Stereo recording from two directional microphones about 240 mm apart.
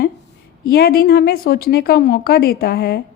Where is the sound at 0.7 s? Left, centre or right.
Left.